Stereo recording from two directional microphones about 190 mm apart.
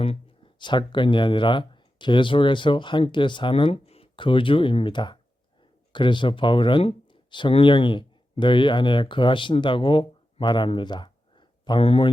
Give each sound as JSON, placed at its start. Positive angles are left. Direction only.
{"t": 0.0, "sound": "speech", "side_deg": 30}